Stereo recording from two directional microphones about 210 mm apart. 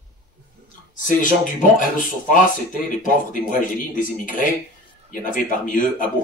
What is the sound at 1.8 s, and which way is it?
Speech, 40° left (ahead or behind).